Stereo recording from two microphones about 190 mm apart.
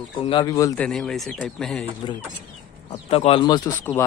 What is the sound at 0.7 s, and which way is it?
Speech, 5° left (ahead or behind).